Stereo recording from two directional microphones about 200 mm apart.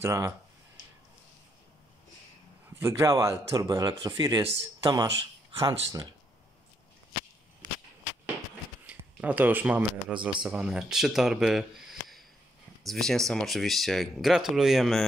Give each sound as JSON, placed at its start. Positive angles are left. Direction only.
{"t": 0.0, "sound": "speech", "side_deg": -15}
{"t": 2.8, "sound": "speech", "side_deg": -15}
{"t": 8.8, "sound": "speech", "side_deg": -10}
{"t": 12.8, "sound": "speech", "side_deg": 0}